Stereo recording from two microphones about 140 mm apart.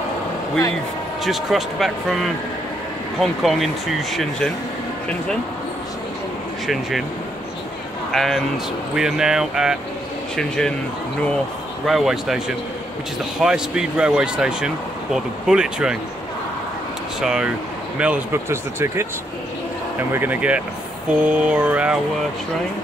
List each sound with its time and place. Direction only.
1.2 s speech: centre (ahead or behind)
6.7 s speech: centre (ahead or behind)
8.1 s a man's voice: centre (ahead or behind)
11.8 s speech: centre (ahead or behind)
17.2 s speech: 5° right (ahead or behind)
20.1 s speech: 15° right (ahead or behind)